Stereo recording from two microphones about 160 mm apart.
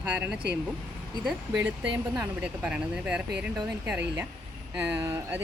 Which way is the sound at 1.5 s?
10° right (ahead or behind).